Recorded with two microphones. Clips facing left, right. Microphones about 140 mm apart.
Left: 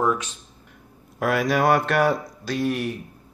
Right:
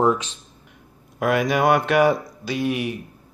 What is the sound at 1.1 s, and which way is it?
Speech, centre (ahead or behind).